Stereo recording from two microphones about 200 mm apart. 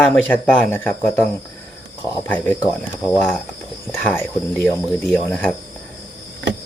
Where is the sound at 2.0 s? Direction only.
15° left (ahead or behind).